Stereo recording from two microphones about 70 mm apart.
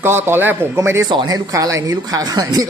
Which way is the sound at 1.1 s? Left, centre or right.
Right.